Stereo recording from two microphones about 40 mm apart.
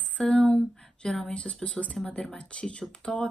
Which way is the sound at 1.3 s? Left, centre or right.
Left.